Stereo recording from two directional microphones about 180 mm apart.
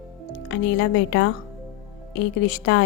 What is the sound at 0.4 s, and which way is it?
A woman's voice, 90° left.